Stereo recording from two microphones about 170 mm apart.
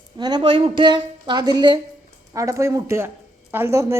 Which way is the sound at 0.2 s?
25° right (ahead or behind).